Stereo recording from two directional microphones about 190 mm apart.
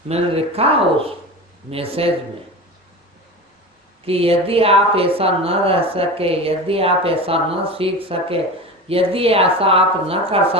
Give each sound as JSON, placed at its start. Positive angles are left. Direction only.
{"t": 0.1, "sound": "a woman's voice", "side_deg": -30}
{"t": 1.7, "sound": "a woman's voice", "side_deg": -30}
{"t": 4.0, "sound": "a woman's voice", "side_deg": -30}